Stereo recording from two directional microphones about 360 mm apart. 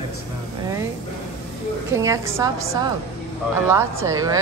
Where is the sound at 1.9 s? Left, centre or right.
Centre.